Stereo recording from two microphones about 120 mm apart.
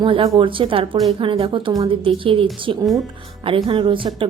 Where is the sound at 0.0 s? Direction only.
45° right (ahead or behind).